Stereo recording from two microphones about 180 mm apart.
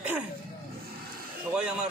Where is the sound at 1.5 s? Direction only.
5° right (ahead or behind).